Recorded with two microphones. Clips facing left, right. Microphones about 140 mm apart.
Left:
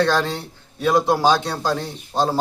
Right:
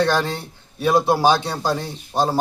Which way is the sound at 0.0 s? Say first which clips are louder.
Even; 15° right (ahead or behind).